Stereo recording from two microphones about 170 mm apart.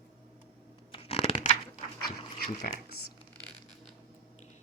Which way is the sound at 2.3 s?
60° left (ahead or behind).